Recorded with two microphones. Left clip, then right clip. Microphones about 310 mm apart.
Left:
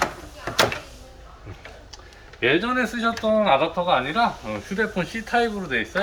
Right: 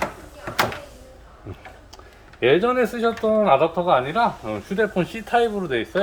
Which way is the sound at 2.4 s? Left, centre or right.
Right.